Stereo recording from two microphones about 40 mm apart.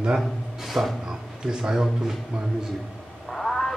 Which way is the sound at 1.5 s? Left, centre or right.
Centre.